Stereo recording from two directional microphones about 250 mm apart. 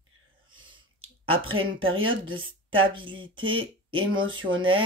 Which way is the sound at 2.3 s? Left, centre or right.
Right.